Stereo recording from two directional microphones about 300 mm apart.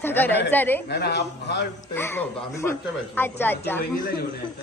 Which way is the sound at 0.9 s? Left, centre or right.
Left.